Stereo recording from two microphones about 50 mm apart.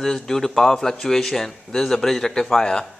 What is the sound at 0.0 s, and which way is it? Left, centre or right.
A man's voice, centre.